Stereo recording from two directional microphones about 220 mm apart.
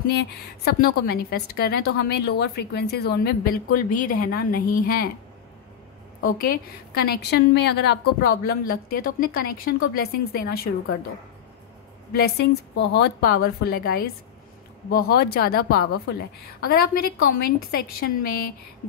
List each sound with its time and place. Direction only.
0.0 s a woman's voice: 45° left (ahead or behind)
6.2 s a woman's voice: 45° left (ahead or behind)
12.1 s a woman's voice: 45° left (ahead or behind)